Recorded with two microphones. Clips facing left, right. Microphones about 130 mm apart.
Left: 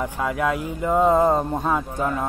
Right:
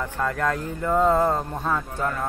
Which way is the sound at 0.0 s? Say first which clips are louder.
Left 2 dB; 10° left (ahead or behind).